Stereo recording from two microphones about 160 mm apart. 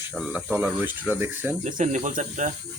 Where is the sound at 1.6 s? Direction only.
50° right (ahead or behind).